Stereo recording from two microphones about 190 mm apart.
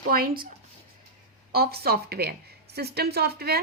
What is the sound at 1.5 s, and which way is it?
Speech, 55° right (ahead or behind).